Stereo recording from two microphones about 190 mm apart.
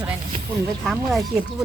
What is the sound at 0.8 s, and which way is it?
Speech, centre (ahead or behind).